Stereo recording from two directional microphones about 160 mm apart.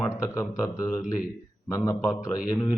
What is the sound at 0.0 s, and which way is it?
Speech, 15° left (ahead or behind).